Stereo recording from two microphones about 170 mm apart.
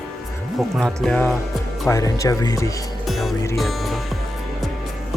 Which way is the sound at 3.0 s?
Centre (ahead or behind).